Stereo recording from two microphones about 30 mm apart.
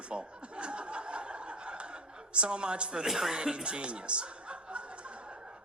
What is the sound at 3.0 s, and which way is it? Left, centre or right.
Speech, centre.